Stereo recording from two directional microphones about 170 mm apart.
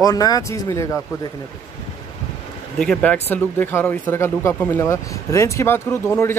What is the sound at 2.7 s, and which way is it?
Speech, 5° left (ahead or behind).